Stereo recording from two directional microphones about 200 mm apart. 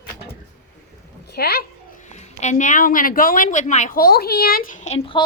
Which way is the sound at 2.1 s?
35° left (ahead or behind).